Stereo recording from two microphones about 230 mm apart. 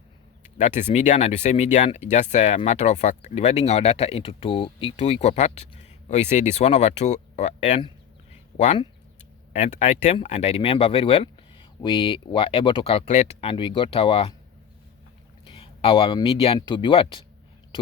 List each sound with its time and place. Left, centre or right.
0.6 s speech: left
15.4 s speech: left